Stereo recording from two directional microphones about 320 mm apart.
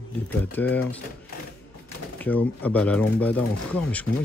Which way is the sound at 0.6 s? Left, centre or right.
Centre.